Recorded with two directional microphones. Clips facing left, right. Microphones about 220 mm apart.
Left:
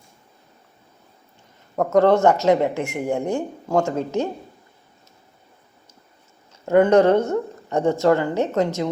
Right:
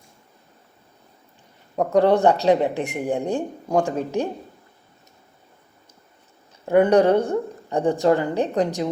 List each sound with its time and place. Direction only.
1.7 s a woman's voice: 15° right (ahead or behind)
6.9 s a woman's voice: 15° right (ahead or behind)